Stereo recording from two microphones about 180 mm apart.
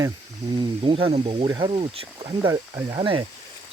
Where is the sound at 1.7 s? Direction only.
35° right (ahead or behind).